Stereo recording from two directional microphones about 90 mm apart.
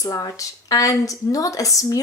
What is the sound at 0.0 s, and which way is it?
A woman's voice, 40° left (ahead or behind).